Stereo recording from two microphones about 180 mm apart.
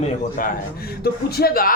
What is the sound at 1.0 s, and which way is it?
Speech, 60° left (ahead or behind).